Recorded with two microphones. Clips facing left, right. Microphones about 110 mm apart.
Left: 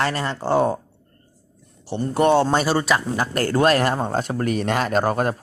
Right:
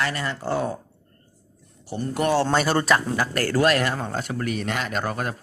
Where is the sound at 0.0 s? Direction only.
35° left (ahead or behind).